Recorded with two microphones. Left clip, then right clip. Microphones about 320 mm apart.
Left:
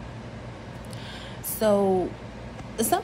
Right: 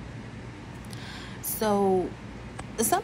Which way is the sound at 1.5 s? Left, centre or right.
Centre.